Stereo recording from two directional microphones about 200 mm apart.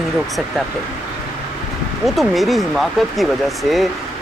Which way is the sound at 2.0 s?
Centre (ahead or behind).